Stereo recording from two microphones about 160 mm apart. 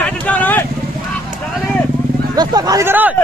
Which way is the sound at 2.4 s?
25° right (ahead or behind).